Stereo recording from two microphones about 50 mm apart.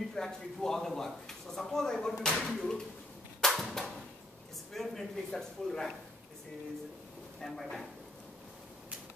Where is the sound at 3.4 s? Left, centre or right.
Centre.